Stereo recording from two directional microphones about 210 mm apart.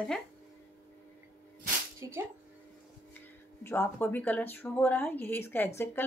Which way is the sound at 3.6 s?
15° left (ahead or behind).